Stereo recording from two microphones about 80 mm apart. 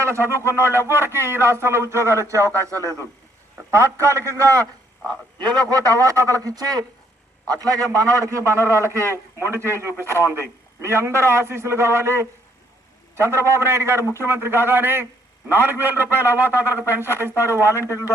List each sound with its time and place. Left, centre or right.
0.0 s a man's voice: right
5.4 s a man's voice: right
17.8 s a man's voice: left